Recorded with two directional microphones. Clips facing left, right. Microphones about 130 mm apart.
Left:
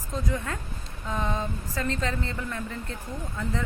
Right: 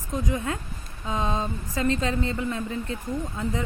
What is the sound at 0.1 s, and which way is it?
Speech, 20° right (ahead or behind).